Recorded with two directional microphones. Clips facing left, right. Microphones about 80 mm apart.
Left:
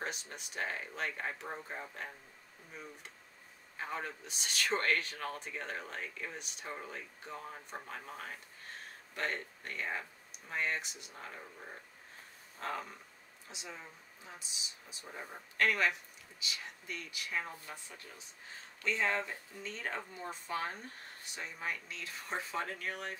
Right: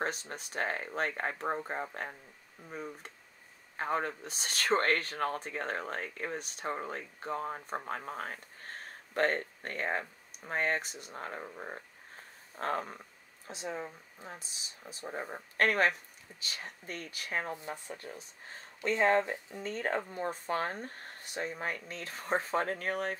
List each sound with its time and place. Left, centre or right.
0.0 s speech: right